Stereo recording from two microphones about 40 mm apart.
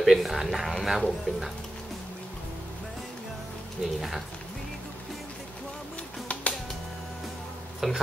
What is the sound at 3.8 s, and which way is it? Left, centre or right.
Speech, centre.